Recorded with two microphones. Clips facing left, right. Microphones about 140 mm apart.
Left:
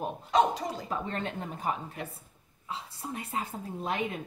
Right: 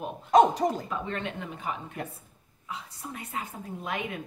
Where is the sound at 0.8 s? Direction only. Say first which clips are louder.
Even; 35° left (ahead or behind).